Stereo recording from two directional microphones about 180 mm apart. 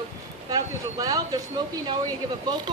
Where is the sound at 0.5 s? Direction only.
20° right (ahead or behind).